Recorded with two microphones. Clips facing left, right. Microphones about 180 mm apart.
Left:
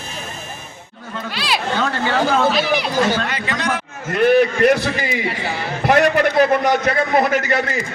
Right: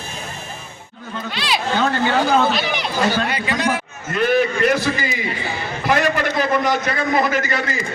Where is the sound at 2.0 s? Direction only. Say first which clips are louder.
Left 2 dB; centre (ahead or behind).